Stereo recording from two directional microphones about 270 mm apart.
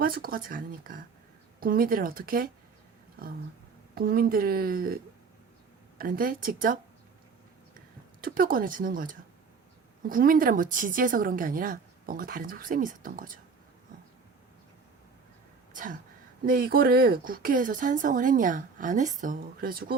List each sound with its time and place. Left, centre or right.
0.0 s speech: right
3.9 s speech: right
6.0 s speech: right
8.2 s speech: right
15.7 s speech: right